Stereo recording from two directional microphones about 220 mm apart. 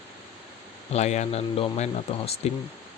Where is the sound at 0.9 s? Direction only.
30° left (ahead or behind).